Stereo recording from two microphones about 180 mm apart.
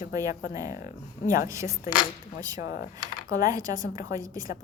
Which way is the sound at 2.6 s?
70° left (ahead or behind).